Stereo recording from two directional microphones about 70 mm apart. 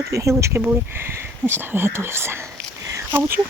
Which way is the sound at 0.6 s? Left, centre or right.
Right.